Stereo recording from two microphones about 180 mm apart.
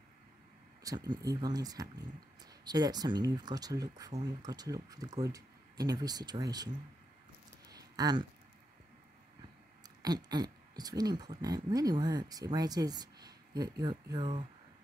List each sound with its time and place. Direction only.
0.8 s speech: 20° right (ahead or behind)
7.6 s a sound: 20° right (ahead or behind)
9.8 s speech: 20° right (ahead or behind)